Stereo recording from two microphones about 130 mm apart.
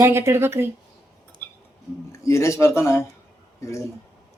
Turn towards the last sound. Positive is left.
turn(degrees=25)  # may be behind; listen again after turning